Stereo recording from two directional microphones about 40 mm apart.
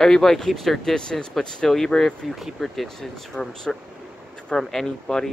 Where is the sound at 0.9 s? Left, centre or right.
Centre.